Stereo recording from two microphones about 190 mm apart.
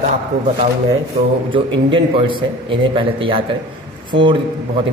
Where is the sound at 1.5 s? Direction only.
25° right (ahead or behind).